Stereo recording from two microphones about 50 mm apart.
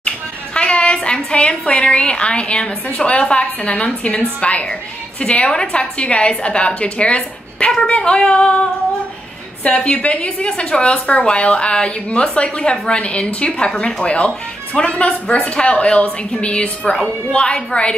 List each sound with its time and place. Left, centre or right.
0.6 s a sound: left
1.7 s speech: centre
9.6 s speech: left